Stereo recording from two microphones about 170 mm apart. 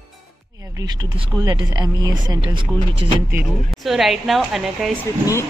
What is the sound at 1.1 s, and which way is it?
Speech, 25° right (ahead or behind).